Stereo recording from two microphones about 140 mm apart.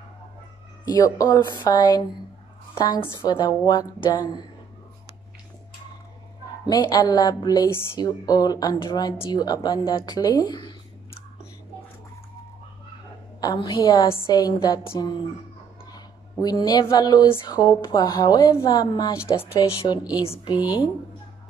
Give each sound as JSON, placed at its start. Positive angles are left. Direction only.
{"t": 0.8, "sound": "a woman's voice", "side_deg": 25}
{"t": 6.6, "sound": "speech", "side_deg": 30}
{"t": 13.4, "sound": "speech", "side_deg": 30}
{"t": 15.9, "sound": "speech", "side_deg": 25}